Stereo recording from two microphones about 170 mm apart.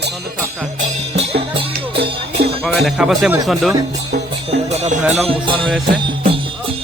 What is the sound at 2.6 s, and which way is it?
Speech, centre (ahead or behind).